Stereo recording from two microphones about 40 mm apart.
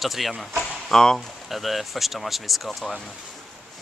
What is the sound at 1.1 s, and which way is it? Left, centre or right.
Speech, centre.